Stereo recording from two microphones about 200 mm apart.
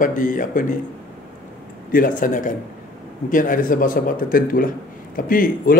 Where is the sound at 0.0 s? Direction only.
40° left (ahead or behind).